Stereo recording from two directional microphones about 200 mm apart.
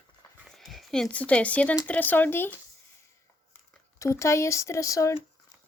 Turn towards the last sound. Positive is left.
turn(degrees=15)  # may be behind; listen again after turning